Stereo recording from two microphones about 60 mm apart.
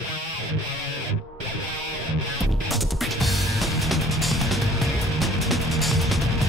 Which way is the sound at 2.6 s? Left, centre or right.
Centre.